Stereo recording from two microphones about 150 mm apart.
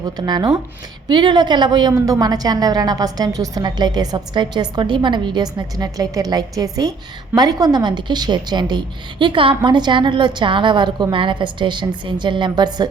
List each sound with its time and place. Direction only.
0.0 s a woman's voice: 25° right (ahead or behind)